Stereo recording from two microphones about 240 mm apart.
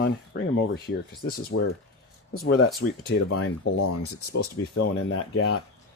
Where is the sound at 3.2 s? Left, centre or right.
Left.